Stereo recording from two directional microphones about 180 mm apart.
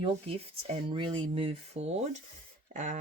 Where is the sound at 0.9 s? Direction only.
30° right (ahead or behind).